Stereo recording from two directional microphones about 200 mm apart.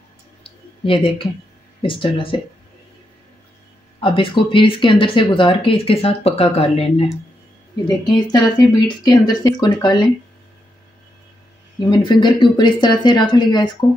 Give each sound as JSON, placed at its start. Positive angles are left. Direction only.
{"t": 0.4, "sound": "a sound", "side_deg": 25}
{"t": 1.8, "sound": "speech", "side_deg": 25}
{"t": 4.0, "sound": "speech", "side_deg": 25}
{"t": 7.8, "sound": "speech", "side_deg": 20}
{"t": 11.8, "sound": "speech", "side_deg": 20}